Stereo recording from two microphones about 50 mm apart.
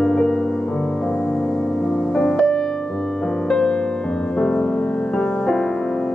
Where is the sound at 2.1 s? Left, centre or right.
Centre.